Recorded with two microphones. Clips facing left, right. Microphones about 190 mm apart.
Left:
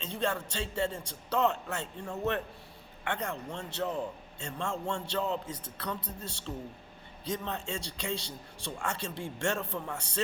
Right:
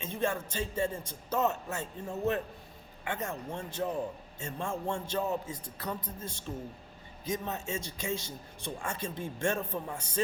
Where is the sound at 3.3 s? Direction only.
15° right (ahead or behind).